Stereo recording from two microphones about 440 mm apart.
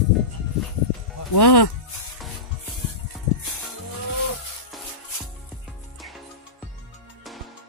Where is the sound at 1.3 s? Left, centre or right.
Left.